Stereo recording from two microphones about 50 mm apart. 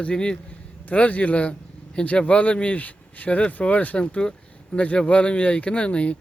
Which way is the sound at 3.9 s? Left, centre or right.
Left.